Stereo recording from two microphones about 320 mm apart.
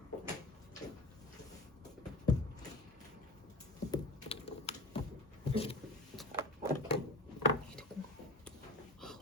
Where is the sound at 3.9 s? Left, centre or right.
Centre.